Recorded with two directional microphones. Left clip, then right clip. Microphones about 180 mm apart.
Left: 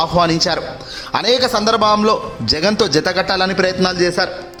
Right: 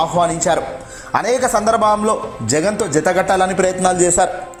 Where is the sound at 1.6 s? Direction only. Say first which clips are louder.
Left 1 dB; 10° left (ahead or behind).